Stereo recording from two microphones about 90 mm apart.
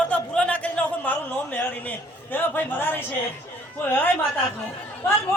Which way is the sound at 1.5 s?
20° left (ahead or behind).